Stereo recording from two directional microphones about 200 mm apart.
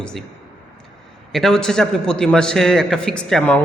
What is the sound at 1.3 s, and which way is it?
A man's voice, centre (ahead or behind).